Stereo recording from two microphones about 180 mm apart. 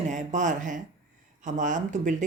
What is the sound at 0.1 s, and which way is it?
Speech, 45° right (ahead or behind).